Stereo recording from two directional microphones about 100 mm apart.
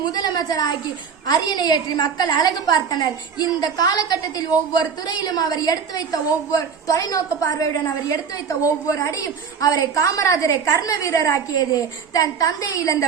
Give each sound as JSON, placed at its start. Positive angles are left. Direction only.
{"t": 0.0, "sound": "a woman's voice", "side_deg": 45}